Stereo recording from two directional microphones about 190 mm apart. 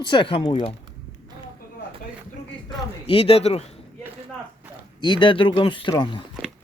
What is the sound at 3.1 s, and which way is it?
Speech, 30° left (ahead or behind).